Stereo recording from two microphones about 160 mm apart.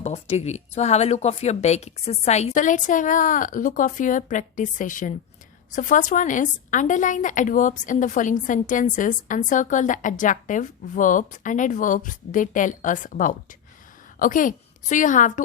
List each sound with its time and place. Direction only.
0.0 s a woman's voice: 40° left (ahead or behind)